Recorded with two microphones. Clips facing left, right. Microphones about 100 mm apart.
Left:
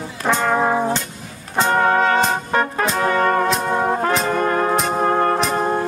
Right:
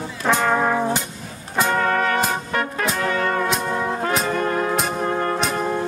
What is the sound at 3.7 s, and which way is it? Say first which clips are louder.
Brass instrument: left 4 dB; 45° left (ahead or behind).